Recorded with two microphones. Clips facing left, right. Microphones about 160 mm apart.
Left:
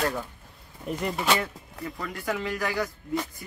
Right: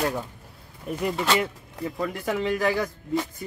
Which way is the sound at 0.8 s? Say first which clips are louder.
Right 2 dB; centre (ahead or behind).